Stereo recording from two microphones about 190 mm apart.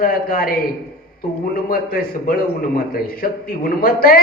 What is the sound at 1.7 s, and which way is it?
A man's voice, 50° left (ahead or behind).